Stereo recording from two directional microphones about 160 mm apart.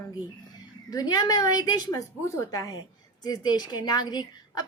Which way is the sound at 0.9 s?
25° left (ahead or behind).